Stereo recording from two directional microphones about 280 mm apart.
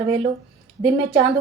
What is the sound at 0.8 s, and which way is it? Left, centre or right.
Speech, centre.